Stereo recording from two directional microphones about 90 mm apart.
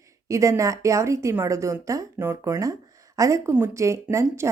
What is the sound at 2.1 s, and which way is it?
Speech, 25° right (ahead or behind).